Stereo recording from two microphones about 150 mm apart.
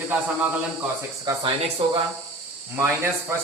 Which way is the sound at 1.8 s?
35° right (ahead or behind).